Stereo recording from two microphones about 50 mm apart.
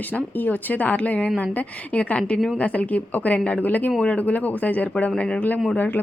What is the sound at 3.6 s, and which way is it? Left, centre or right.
A woman's voice, left.